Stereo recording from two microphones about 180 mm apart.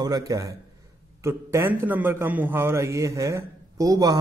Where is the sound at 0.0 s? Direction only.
20° right (ahead or behind).